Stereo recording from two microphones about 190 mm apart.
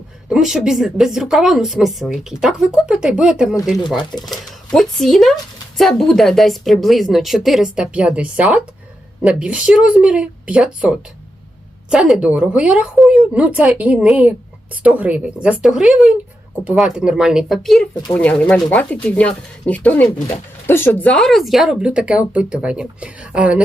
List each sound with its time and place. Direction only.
0.3 s speech: 5° right (ahead or behind)
3.6 s speech: 20° left (ahead or behind)
4.3 s speech: centre (ahead or behind)